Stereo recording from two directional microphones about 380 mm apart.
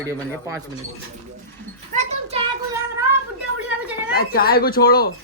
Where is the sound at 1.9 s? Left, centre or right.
Centre.